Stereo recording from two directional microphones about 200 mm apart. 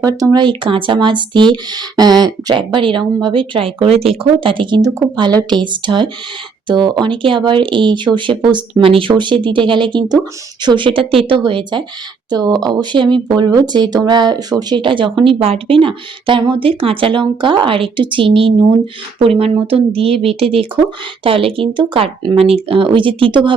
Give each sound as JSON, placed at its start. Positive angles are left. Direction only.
{"t": 0.0, "sound": "speech", "side_deg": -20}